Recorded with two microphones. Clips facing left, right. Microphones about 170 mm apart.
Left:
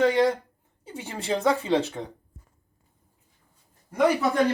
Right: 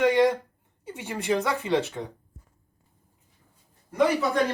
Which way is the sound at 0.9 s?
30° left (ahead or behind).